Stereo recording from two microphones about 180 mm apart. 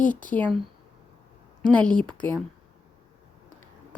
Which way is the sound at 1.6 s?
5° left (ahead or behind).